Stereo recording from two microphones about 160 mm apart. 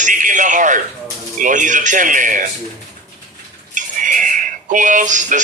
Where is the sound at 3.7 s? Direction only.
55° right (ahead or behind).